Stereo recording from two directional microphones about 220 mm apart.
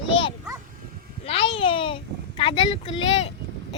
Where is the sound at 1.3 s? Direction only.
25° left (ahead or behind).